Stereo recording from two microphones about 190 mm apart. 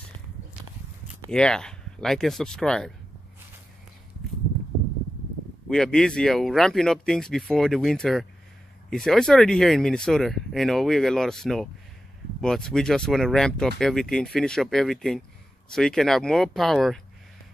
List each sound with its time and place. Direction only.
1.3 s speech: 5° left (ahead or behind)
5.7 s speech: 5° left (ahead or behind)